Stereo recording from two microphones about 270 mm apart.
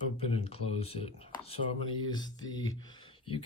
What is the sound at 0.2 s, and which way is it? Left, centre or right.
Speech, left.